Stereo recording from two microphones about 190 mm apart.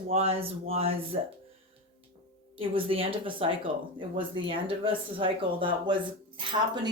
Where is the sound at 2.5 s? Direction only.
30° right (ahead or behind).